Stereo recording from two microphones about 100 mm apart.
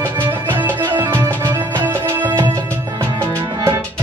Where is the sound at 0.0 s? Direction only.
20° right (ahead or behind).